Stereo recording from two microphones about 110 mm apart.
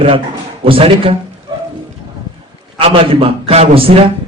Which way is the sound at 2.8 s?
60° right (ahead or behind).